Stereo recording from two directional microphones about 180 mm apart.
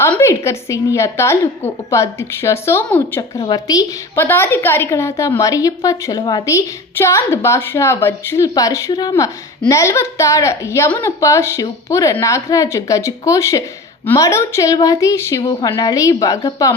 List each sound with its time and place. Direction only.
0.0 s a woman's voice: 15° left (ahead or behind)